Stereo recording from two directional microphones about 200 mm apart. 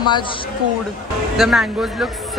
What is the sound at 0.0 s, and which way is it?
Speech, 25° left (ahead or behind).